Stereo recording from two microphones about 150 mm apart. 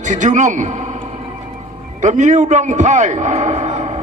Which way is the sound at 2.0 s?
55° right (ahead or behind).